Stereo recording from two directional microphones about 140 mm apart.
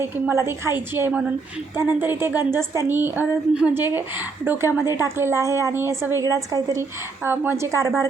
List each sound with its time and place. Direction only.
0.0 s a woman's voice: 15° right (ahead or behind)